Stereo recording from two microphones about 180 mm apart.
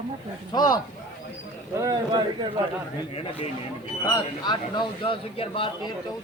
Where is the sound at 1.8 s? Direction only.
20° right (ahead or behind).